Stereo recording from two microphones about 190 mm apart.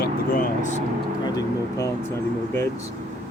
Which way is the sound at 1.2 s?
15° left (ahead or behind).